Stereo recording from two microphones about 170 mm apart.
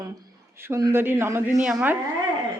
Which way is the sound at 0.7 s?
15° right (ahead or behind).